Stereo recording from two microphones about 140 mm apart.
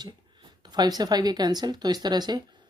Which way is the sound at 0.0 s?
30° right (ahead or behind).